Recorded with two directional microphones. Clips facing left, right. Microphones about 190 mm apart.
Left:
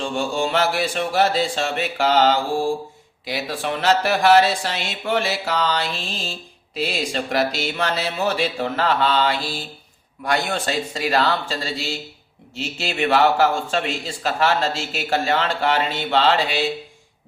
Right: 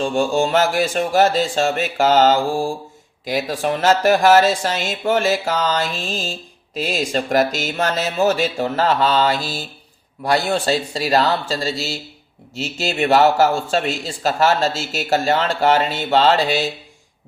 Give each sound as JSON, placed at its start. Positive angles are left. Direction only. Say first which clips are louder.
{"t": 0.0, "sound": "a man's voice", "louder": "right 5 dB", "side_deg": -45}